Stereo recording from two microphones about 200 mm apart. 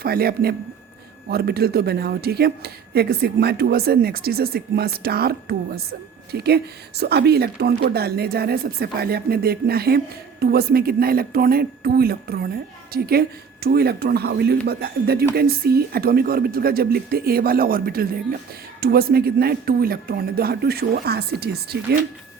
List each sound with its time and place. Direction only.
0.0 s speech: 50° right (ahead or behind)